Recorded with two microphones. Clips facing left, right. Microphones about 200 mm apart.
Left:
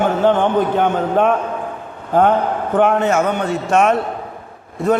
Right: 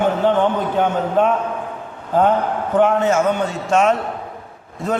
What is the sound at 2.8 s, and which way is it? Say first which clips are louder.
A man's voice: even; 60° left (ahead or behind).